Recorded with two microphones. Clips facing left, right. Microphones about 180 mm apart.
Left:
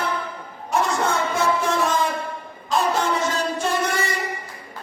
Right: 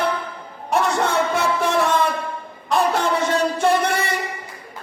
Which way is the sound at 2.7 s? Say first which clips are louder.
Right 2 dB; 60° right (ahead or behind).